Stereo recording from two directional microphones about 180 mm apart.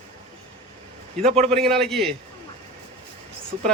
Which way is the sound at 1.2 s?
35° right (ahead or behind).